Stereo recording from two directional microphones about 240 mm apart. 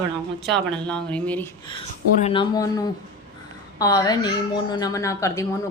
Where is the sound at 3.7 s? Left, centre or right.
Centre.